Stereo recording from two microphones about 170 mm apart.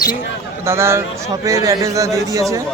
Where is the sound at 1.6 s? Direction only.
20° right (ahead or behind).